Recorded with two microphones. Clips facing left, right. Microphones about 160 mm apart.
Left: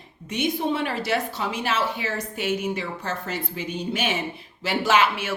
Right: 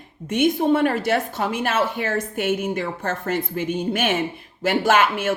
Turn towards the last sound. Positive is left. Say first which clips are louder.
# right 3 dB
turn(degrees=-50)  # may be behind; listen again after turning